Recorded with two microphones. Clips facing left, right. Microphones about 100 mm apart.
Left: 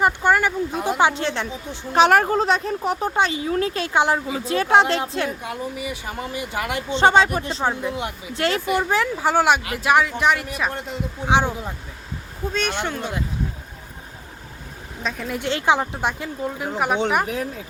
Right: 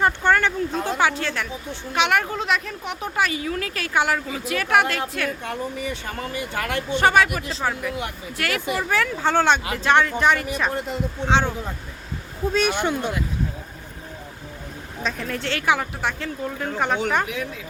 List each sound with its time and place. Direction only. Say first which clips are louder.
0.0 s speech: left 1 dB; 15° left (ahead or behind)
1.9 s speech: left 6 dB; 35° left (ahead or behind); by 11.0 s centre (ahead or behind)
11.3 s speech: left 2 dB; 15° left (ahead or behind)
12.5 s speech: right 3 dB; 10° right (ahead or behind)
15.0 s speech: even; 5° left (ahead or behind)
15.4 s speech: left 3 dB; 20° left (ahead or behind)
17.2 s speech: left 3 dB; 40° left (ahead or behind)